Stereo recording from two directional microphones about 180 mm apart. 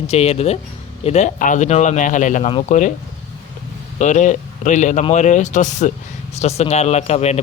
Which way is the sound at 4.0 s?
40° left (ahead or behind).